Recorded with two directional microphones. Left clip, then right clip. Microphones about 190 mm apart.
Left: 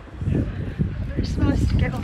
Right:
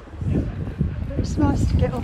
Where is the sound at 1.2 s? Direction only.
30° right (ahead or behind).